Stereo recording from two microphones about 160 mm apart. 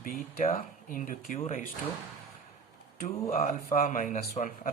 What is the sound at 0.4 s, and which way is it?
Speech, 50° left (ahead or behind).